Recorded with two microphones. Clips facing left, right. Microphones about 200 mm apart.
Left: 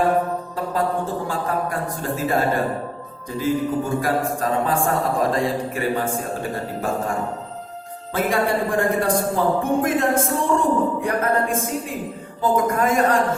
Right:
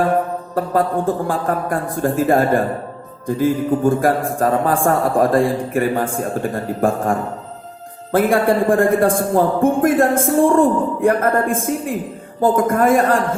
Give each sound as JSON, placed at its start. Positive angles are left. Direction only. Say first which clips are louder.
{"t": 0.5, "sound": "a man's voice", "louder": "right 7 dB", "side_deg": -50}